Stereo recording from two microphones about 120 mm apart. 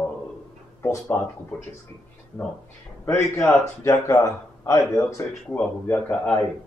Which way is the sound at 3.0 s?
20° left (ahead or behind).